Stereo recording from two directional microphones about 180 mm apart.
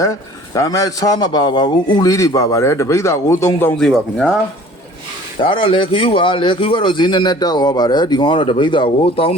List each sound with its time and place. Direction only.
0.0 s a man's voice: 20° left (ahead or behind); by 4.4 s 5° left (ahead or behind)
5.4 s speech: 30° left (ahead or behind)